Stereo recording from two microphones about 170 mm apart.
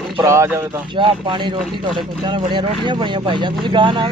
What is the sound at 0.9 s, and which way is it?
Speech, 30° right (ahead or behind).